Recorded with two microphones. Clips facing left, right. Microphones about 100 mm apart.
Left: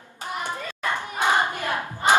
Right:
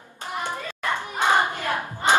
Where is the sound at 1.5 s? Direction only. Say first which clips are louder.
Even; 15° left (ahead or behind).